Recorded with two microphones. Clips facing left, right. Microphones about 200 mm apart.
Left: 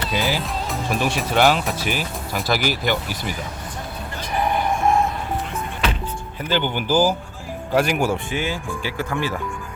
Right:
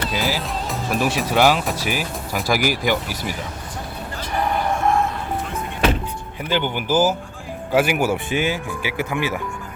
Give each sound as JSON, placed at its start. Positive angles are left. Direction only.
{"t": 0.1, "sound": "speech", "side_deg": 0}
{"t": 6.5, "sound": "speech", "side_deg": -10}